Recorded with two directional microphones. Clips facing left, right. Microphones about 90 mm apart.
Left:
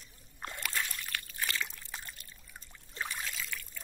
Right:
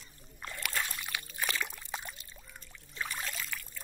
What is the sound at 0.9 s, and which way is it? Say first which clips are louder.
Trickle: right 1 dB; 15° right (ahead or behind).